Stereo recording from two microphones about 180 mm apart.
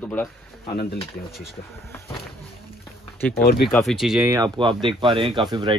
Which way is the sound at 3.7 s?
Centre (ahead or behind).